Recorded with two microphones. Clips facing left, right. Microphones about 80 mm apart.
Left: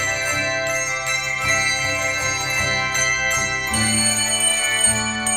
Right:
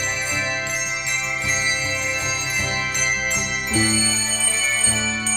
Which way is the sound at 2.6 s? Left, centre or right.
Left.